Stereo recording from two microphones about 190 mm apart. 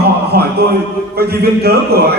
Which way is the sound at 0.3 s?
55° right (ahead or behind).